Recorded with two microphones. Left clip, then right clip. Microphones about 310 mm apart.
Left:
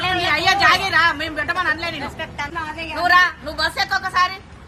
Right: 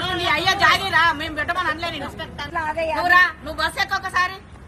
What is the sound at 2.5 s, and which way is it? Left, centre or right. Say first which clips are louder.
Speech: right 4 dB; right.